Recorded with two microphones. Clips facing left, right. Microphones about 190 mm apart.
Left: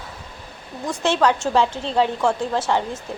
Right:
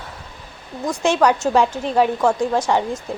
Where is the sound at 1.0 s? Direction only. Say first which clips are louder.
Right 2 dB; 10° right (ahead or behind).